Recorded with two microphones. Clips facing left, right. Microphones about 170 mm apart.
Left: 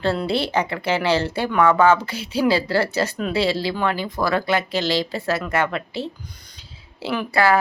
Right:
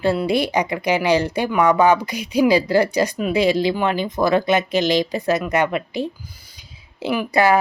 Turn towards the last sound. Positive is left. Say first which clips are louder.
# right 2 dB
turn(degrees=-15)  # may be behind; listen again after turning